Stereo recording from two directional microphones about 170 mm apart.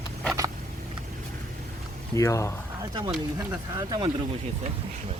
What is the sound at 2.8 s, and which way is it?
Speech, 20° right (ahead or behind).